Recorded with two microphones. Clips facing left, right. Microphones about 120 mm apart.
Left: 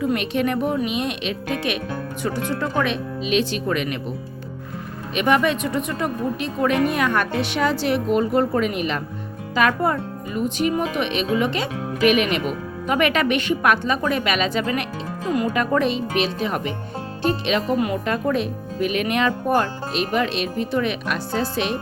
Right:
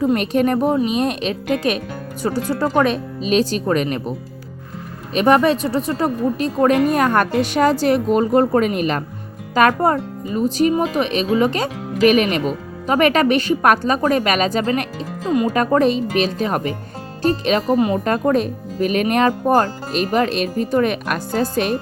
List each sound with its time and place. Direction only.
0.0 s speech: 35° right (ahead or behind)
5.1 s speech: 35° right (ahead or behind)
17.7 s speech: 25° right (ahead or behind)
18.0 s speech: 40° right (ahead or behind)